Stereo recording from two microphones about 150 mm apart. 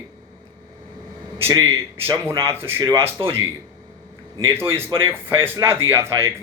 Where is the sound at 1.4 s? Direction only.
15° right (ahead or behind).